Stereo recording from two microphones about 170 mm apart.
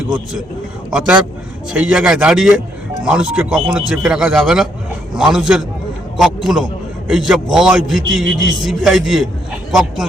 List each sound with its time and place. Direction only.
0.9 s a man's voice: 5° right (ahead or behind)